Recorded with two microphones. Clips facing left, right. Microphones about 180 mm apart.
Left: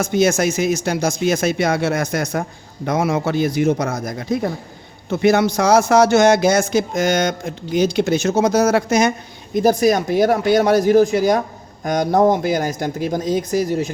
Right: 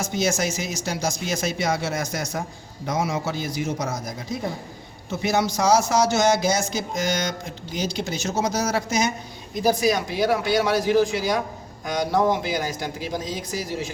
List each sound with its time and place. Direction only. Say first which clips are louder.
0.0 s speech: left 8 dB; 60° left (ahead or behind)